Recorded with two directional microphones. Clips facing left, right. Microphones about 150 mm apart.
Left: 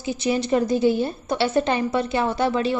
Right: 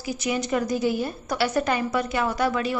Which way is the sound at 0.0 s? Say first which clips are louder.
Left 4 dB; 25° left (ahead or behind).